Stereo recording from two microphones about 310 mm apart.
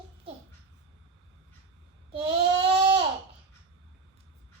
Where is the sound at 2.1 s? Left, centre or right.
Centre.